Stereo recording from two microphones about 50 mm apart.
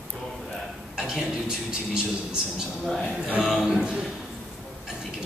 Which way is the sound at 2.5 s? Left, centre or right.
Centre.